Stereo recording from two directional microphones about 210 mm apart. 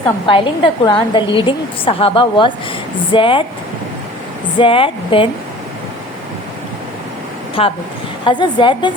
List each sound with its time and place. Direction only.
0.3 s a woman's voice: 25° left (ahead or behind)
4.5 s a woman's voice: 25° left (ahead or behind)
7.6 s a woman's voice: 25° left (ahead or behind)